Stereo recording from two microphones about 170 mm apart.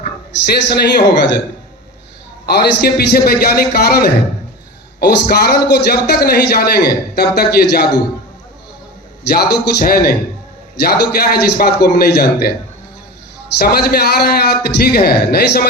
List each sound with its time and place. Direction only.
0.4 s speech: 75° left (ahead or behind)
2.5 s a man's voice: 70° left (ahead or behind)
9.3 s a man's voice: 65° left (ahead or behind)
13.6 s a man's voice: 70° left (ahead or behind)